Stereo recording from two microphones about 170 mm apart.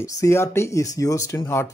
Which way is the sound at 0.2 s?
15° left (ahead or behind).